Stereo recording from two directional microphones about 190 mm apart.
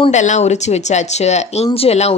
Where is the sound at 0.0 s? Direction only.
40° left (ahead or behind).